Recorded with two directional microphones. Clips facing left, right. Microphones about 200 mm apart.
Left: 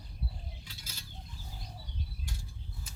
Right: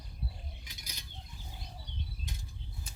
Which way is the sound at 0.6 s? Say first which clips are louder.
Left 1 dB; 15° right (ahead or behind).